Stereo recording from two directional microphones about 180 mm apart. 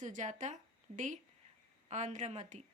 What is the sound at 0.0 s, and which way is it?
A woman's voice, 40° right (ahead or behind).